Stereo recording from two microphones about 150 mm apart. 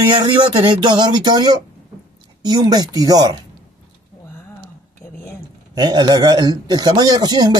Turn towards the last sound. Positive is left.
turn(degrees=-30)  # may be behind; listen again after turning